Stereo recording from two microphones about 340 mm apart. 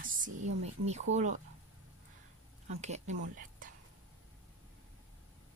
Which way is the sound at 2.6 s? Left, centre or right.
Centre.